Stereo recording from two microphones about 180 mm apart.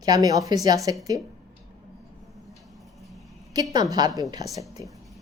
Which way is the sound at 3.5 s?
20° right (ahead or behind).